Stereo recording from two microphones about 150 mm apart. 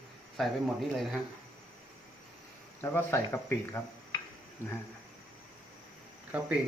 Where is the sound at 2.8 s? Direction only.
15° left (ahead or behind).